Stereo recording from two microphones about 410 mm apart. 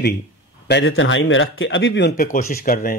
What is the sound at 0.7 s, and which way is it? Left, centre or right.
Speech, left.